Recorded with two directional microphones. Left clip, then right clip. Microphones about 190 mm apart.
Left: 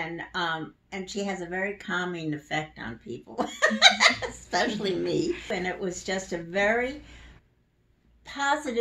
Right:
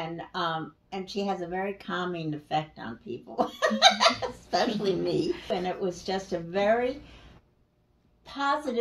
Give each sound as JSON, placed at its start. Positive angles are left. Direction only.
{"t": 0.0, "sound": "speech", "side_deg": 20}
{"t": 8.3, "sound": "speech", "side_deg": 20}